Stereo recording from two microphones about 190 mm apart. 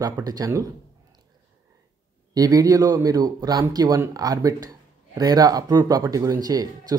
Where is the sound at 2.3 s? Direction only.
20° right (ahead or behind).